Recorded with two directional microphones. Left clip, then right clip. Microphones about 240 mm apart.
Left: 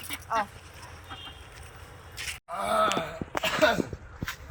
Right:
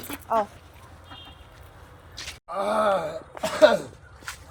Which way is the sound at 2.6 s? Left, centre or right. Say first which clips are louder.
Right 2 dB; right.